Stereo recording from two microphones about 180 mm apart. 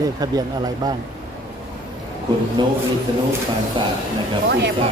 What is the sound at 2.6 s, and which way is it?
Speech, 25° right (ahead or behind).